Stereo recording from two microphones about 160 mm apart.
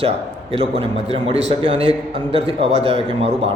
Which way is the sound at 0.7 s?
40° right (ahead or behind).